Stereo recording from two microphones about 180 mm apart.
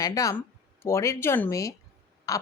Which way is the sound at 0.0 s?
20° left (ahead or behind).